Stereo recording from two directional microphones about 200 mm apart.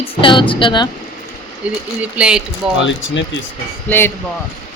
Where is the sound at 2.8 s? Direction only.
65° left (ahead or behind).